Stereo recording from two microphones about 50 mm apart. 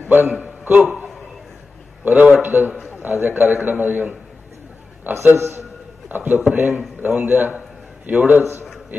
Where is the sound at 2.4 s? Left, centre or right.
Right.